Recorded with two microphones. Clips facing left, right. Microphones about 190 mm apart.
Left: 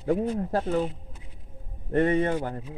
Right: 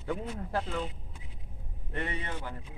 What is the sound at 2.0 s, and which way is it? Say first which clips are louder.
Speech: left 14 dB; 50° left (ahead or behind).